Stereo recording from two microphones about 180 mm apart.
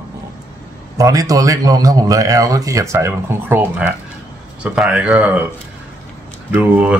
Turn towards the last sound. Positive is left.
turn(degrees=-10)  # may be behind; listen again after turning